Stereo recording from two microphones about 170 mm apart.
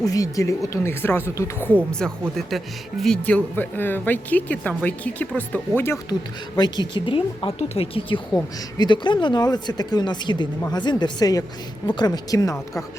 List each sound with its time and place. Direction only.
0.0 s speech: 20° left (ahead or behind)
6.6 s speech: 25° left (ahead or behind)